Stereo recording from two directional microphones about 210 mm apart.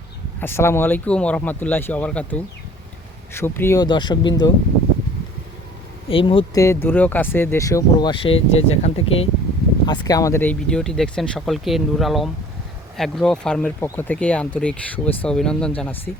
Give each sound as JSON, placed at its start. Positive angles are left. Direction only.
{"t": 0.3, "sound": "speech", "side_deg": 10}
{"t": 6.1, "sound": "speech", "side_deg": 25}
{"t": 9.8, "sound": "speech", "side_deg": 20}